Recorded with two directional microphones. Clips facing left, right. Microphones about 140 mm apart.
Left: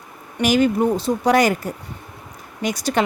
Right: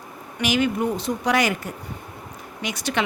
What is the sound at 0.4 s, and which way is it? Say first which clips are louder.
A woman's voice: left 5 dB; 40° left (ahead or behind).